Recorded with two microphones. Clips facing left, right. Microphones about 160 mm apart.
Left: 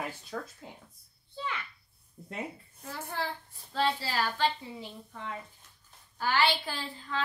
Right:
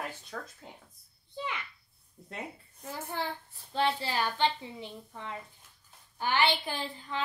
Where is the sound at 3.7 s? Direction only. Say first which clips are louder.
Even; 20° right (ahead or behind).